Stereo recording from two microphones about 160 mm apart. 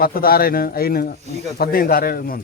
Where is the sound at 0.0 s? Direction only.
65° left (ahead or behind).